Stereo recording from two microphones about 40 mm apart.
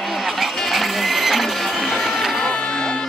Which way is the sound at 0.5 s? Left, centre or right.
Centre.